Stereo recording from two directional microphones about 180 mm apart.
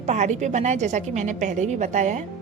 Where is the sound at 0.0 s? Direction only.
40° right (ahead or behind).